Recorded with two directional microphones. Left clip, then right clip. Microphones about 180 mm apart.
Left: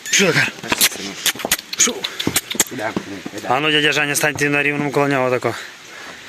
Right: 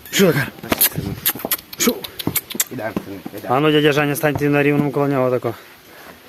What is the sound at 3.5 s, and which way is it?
A man's voice, 10° right (ahead or behind).